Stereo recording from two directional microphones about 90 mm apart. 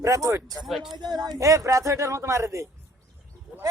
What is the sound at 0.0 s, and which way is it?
Speech, 35° right (ahead or behind).